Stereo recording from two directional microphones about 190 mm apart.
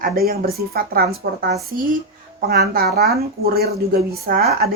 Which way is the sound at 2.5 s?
55° right (ahead or behind).